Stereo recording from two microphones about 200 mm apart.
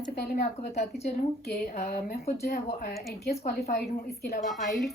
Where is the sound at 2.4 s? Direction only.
50° left (ahead or behind).